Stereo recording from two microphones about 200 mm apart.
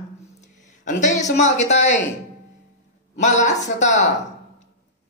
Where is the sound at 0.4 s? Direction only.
35° left (ahead or behind).